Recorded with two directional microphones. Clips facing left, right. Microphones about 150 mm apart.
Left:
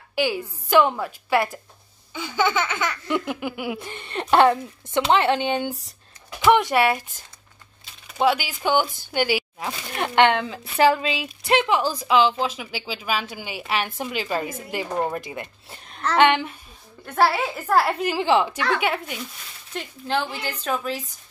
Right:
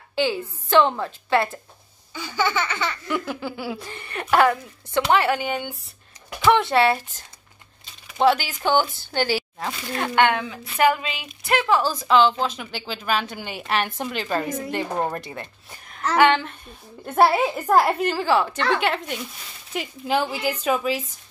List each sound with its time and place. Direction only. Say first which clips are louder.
0.1 s a woman's voice: right 1 dB; 10° left (ahead or behind)
2.1 s laughter: left 1 dB; 20° left (ahead or behind)
6.4 s a woman's voice: even; 15° left (ahead or behind)
9.9 s laughter: left 2 dB; 20° left (ahead or behind)
11.8 s a woman's voice: right 1 dB; 10° left (ahead or behind)
17.0 s a woman's voice: right 3 dB; 25° right (ahead or behind)
18.0 s a woman's voice: left 1 dB; 15° left (ahead or behind)
18.7 s speech: right 1 dB; 5° left (ahead or behind)
19.7 s a woman's voice: right 2 dB; 10° right (ahead or behind)